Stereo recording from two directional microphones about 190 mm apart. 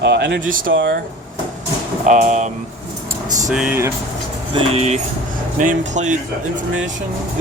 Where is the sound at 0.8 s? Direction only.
50° right (ahead or behind).